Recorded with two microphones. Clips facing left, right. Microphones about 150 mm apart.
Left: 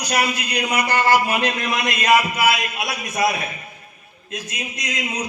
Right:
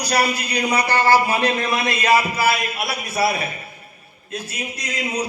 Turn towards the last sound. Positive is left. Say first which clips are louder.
# right 2 dB
turn(degrees=-30)  # may be behind; listen again after turning